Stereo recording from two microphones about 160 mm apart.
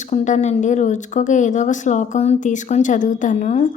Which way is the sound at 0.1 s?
50° left (ahead or behind).